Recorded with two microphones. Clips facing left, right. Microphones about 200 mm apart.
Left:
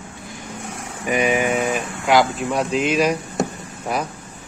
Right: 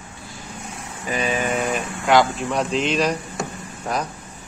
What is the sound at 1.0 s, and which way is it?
Speech, 15° left (ahead or behind).